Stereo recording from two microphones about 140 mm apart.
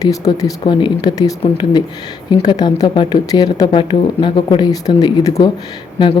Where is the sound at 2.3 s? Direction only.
30° left (ahead or behind).